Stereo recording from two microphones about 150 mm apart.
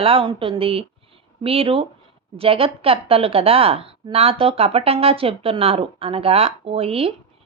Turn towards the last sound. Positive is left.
turn(degrees=-40)  # may be behind; listen again after turning